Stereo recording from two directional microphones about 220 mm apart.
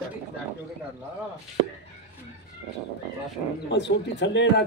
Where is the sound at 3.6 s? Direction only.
50° left (ahead or behind).